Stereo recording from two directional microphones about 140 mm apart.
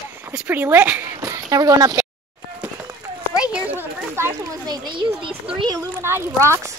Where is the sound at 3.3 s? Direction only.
10° right (ahead or behind).